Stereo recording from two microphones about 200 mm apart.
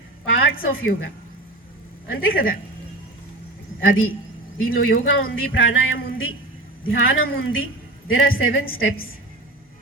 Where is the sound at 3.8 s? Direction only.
80° left.